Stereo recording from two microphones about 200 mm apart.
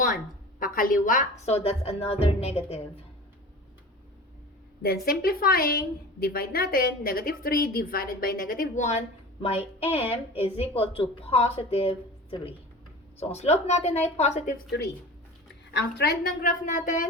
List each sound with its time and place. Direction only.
0.6 s a woman's voice: 45° left (ahead or behind)
4.8 s a woman's voice: 50° left (ahead or behind); by 14.5 s 35° left (ahead or behind)
15.7 s a woman's voice: 55° left (ahead or behind)